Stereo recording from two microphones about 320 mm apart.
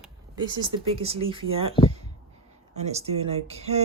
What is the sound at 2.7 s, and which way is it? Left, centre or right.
Speech, centre.